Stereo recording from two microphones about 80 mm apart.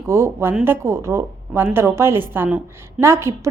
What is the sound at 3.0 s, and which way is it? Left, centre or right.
Speech, right.